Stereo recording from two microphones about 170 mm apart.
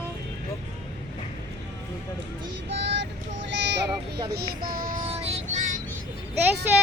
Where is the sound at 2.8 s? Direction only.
90° right.